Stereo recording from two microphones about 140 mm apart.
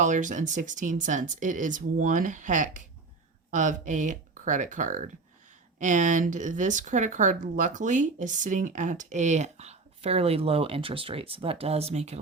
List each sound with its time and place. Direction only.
0.0 s speech: 60° right (ahead or behind)